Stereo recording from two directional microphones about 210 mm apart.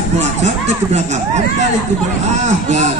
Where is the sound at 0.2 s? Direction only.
35° right (ahead or behind).